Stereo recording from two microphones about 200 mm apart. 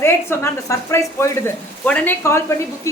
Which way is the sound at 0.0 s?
15° left (ahead or behind).